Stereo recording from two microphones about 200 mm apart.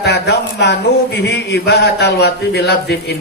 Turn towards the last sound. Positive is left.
turn(degrees=55)  # may be behind; listen again after turning